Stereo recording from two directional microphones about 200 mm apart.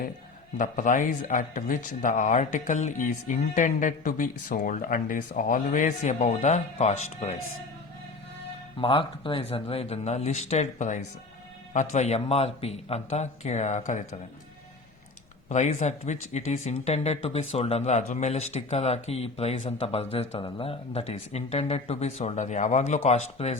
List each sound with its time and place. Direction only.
0.5 s a man's voice: 40° left (ahead or behind)
8.8 s a man's voice: 25° left (ahead or behind)
15.4 s a man's voice: 35° left (ahead or behind)